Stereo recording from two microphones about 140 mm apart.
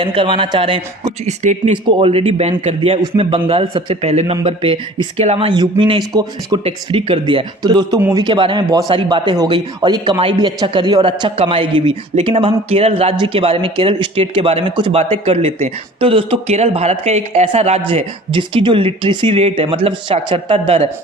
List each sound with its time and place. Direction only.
0.0 s speech: 40° right (ahead or behind)
1.2 s speech: 55° right (ahead or behind)
1.8 s speech: 40° right (ahead or behind)
5.5 s speech: 35° right (ahead or behind)